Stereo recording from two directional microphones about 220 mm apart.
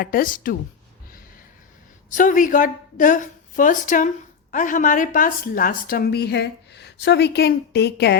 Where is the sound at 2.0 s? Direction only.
35° left (ahead or behind).